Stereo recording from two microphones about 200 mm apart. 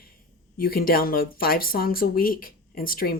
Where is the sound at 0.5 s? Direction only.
45° left (ahead or behind).